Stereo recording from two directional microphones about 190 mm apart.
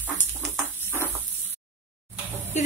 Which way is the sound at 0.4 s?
10° left (ahead or behind).